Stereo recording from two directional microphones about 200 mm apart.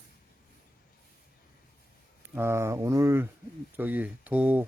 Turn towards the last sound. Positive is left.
turn(degrees=-5)  # may be behind; listen again after turning